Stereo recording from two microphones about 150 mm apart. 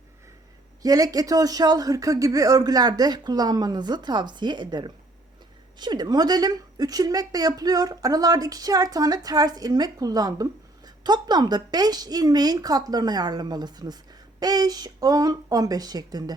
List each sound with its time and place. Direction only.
0.8 s a woman's voice: 25° right (ahead or behind)